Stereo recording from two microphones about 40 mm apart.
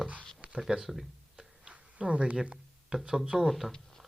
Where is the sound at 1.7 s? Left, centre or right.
Right.